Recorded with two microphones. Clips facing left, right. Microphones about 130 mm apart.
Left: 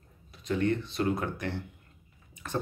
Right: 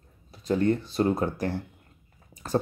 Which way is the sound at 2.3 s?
35° right (ahead or behind).